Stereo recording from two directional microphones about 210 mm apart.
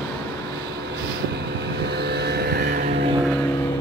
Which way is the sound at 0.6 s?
50° right (ahead or behind).